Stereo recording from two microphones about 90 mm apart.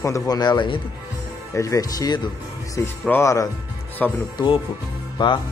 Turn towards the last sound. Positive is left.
turn(degrees=60)  # may be behind; listen again after turning